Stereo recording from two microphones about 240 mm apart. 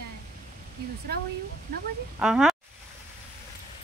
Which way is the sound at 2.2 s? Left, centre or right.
Centre.